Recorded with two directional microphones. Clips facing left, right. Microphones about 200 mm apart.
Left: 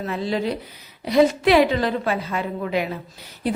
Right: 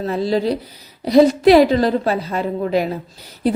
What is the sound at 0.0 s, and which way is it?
A woman's voice, 35° right (ahead or behind).